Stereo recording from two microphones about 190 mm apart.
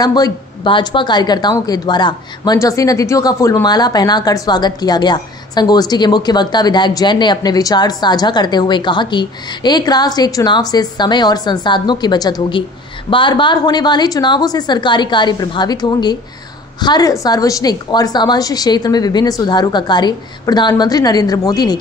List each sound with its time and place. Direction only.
0.0 s a woman's voice: 20° left (ahead or behind)